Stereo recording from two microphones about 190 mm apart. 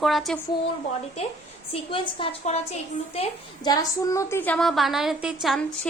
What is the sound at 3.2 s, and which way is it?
A woman's voice, 20° left (ahead or behind).